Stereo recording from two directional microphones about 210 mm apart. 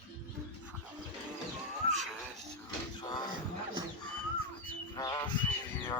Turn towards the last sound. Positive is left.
turn(degrees=20)  # may be behind; listen again after turning